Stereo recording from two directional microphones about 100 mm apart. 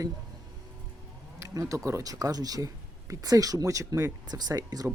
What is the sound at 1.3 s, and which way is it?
Speech, 30° right (ahead or behind).